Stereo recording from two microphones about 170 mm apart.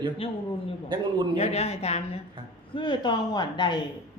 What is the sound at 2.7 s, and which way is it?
Speech, 25° left (ahead or behind).